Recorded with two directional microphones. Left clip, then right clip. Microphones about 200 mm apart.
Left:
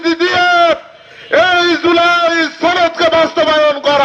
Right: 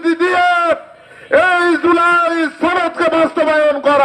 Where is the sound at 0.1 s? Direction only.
50° right (ahead or behind).